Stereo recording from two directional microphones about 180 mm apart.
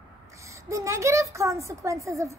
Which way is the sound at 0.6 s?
15° right (ahead or behind).